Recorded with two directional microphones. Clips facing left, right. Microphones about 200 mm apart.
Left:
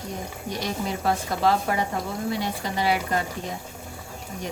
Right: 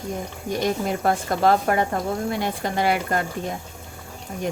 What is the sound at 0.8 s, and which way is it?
Speech, 50° right (ahead or behind).